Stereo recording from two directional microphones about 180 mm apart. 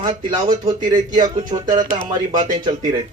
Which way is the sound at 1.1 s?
25° right (ahead or behind).